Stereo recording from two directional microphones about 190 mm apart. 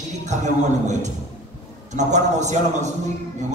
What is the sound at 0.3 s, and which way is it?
Speech, 40° right (ahead or behind).